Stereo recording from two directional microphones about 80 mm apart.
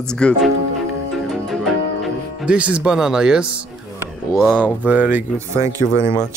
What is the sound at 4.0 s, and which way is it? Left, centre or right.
Speech, right.